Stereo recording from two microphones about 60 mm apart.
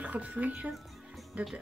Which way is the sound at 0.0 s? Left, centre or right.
Right.